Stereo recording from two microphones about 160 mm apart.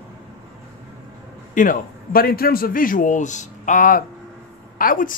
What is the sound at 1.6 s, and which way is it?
A man's voice, 60° left (ahead or behind).